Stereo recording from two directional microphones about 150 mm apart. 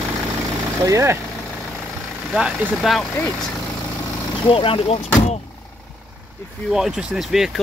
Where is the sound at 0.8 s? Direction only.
20° right (ahead or behind).